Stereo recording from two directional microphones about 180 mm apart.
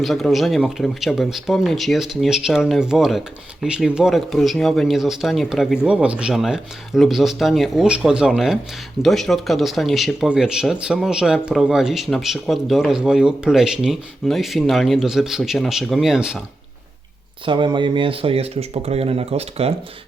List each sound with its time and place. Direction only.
0.0 s speech: centre (ahead or behind)
17.4 s speech: 25° right (ahead or behind)